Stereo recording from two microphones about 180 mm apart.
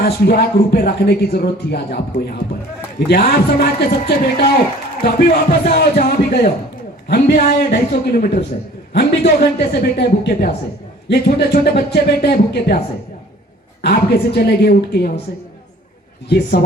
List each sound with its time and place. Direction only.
0.0 s speech: 60° left (ahead or behind)
13.8 s speech: 65° left (ahead or behind)